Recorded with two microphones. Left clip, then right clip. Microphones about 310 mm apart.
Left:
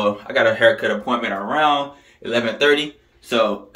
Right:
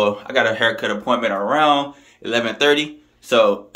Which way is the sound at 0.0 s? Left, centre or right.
Centre.